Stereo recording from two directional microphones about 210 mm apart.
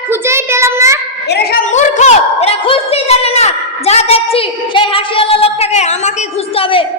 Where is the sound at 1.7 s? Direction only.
35° left (ahead or behind).